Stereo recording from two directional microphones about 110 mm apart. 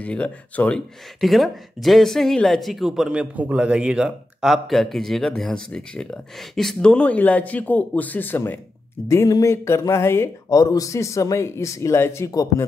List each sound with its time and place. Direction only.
0.0 s speech: 10° left (ahead or behind)
9.0 s speech: 30° left (ahead or behind)